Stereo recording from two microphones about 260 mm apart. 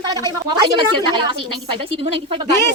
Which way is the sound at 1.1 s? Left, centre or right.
Centre.